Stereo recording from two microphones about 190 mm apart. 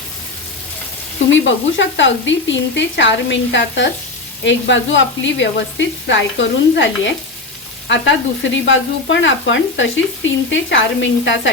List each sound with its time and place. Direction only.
1.3 s frying: 80° left
8.5 s frying: 75° left (ahead or behind)